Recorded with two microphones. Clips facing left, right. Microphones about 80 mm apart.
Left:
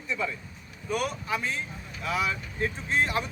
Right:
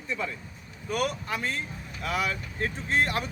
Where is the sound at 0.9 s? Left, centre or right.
Right.